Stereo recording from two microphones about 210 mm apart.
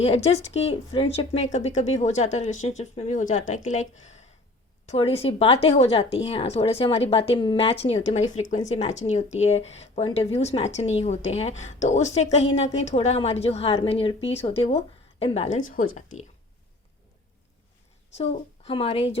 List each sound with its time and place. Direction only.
0.0 s speech: 30° left (ahead or behind)
18.2 s speech: 30° left (ahead or behind)